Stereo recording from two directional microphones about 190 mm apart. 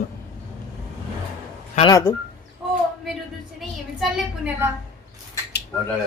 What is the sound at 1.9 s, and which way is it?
Speech, 20° left (ahead or behind).